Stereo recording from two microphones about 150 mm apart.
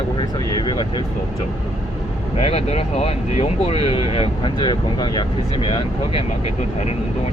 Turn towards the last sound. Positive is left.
turn(degrees=35)  # may be behind; listen again after turning